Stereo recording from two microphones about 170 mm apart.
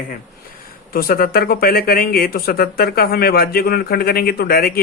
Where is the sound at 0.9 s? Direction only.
60° left (ahead or behind).